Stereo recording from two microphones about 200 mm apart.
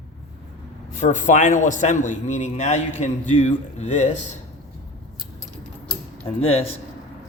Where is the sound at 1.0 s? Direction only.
40° left (ahead or behind).